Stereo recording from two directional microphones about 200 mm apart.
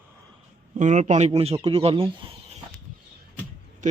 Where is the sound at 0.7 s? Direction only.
35° right (ahead or behind).